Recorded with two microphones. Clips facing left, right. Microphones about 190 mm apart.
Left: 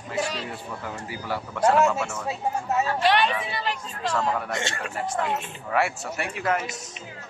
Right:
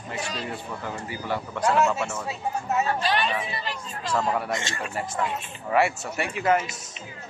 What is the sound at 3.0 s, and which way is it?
Speech, 75° left (ahead or behind).